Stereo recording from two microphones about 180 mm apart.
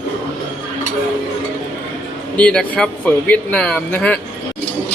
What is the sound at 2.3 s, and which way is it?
Speech, 5° left (ahead or behind).